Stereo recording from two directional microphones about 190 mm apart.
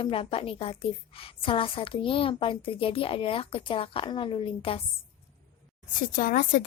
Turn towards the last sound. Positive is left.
turn(degrees=45)  # may be behind; listen again after turning